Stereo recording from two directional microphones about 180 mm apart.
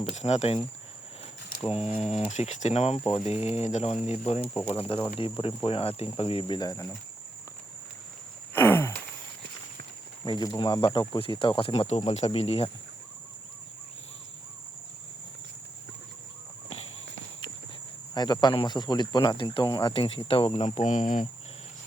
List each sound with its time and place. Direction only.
0.0 s speech: 35° left (ahead or behind)
1.7 s speech: 35° left (ahead or behind)
3.0 s speech: 5° left (ahead or behind)
3.2 s speech: 35° left (ahead or behind); by 6.9 s 20° left (ahead or behind)
8.5 s a sound: 15° left (ahead or behind)
10.2 s speech: 25° left (ahead or behind)
18.1 s speech: 25° left (ahead or behind); by 21.2 s 45° left (ahead or behind)